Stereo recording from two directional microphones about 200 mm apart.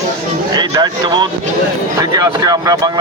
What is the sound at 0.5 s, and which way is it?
Speech, 20° right (ahead or behind).